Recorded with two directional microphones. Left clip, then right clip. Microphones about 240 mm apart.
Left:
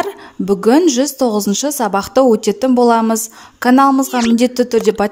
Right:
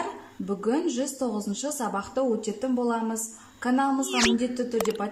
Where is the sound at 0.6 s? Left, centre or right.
Left.